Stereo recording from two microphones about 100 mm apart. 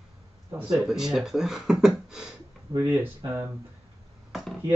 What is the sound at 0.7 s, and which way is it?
Speech, 5° right (ahead or behind).